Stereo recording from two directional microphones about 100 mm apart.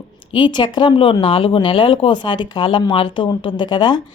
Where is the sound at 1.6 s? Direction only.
55° left (ahead or behind).